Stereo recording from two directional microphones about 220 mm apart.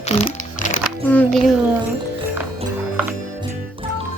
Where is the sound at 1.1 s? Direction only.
5° left (ahead or behind).